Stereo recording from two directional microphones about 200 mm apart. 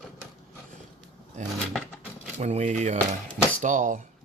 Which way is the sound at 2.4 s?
35° right (ahead or behind).